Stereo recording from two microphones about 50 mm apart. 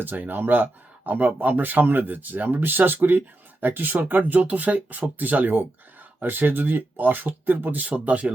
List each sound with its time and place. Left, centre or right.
0.0 s speech: right